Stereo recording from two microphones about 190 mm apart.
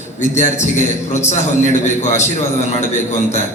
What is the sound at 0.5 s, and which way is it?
A man's voice, 40° left (ahead or behind).